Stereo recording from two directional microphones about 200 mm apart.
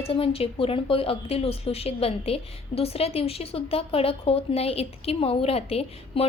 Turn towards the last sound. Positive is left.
turn(degrees=30)  # may be behind; listen again after turning